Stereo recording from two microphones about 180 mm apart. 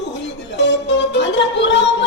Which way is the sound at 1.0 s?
75° left (ahead or behind).